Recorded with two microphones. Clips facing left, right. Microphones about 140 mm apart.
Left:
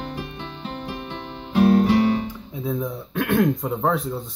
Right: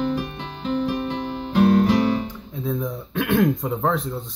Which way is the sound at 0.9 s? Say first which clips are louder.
Right 7 dB; 40° right (ahead or behind).